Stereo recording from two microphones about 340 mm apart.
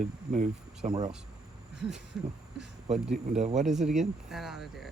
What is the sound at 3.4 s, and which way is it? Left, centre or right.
Speech, right.